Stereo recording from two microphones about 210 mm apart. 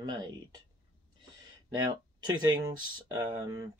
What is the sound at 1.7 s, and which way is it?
Speech, 20° right (ahead or behind).